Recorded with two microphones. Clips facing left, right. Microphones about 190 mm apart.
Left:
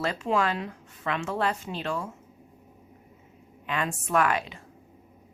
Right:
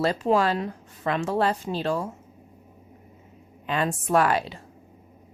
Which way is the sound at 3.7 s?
35° right (ahead or behind).